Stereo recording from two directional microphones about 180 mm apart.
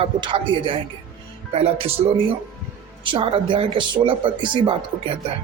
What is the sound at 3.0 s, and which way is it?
Speech, 30° right (ahead or behind).